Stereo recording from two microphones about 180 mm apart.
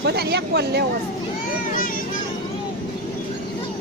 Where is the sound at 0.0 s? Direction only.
65° right (ahead or behind).